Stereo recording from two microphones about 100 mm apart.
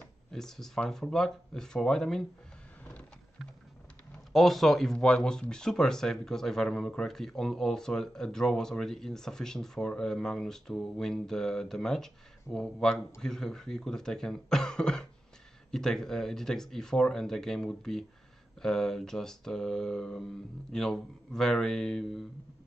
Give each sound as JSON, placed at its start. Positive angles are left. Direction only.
{"t": 0.3, "sound": "speech", "side_deg": 5}
{"t": 4.3, "sound": "speech", "side_deg": 0}